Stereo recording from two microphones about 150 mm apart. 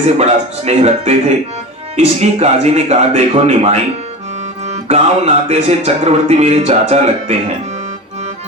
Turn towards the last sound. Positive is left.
turn(degrees=-45)  # may be behind; listen again after turning